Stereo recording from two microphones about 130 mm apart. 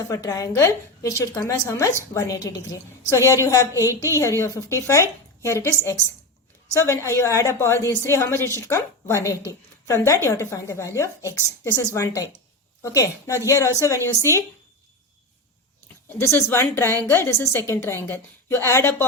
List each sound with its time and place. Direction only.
0.1 s a woman's voice: 25° left (ahead or behind)
6.7 s a woman's voice: 20° left (ahead or behind)
16.1 s a woman's voice: 20° left (ahead or behind)